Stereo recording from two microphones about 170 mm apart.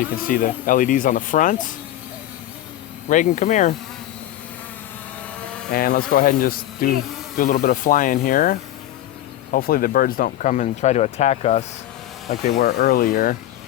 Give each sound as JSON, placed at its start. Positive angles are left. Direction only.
{"t": 0.3, "sound": "speech", "side_deg": 55}
{"t": 3.1, "sound": "speech", "side_deg": 50}
{"t": 5.7, "sound": "speech", "side_deg": 60}
{"t": 12.3, "sound": "speech", "side_deg": 65}